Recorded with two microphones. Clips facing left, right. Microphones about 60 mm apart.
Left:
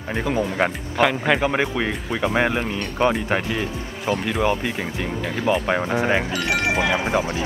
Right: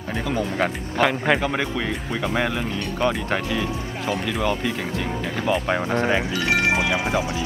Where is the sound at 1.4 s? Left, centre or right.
Centre.